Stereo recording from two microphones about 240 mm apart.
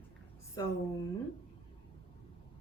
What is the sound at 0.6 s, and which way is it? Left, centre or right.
Speech, centre.